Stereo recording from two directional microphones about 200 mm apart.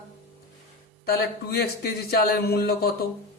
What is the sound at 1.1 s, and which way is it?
Speech, 50° left (ahead or behind).